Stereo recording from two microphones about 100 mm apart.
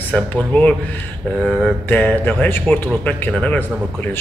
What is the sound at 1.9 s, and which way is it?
Speech, 15° left (ahead or behind).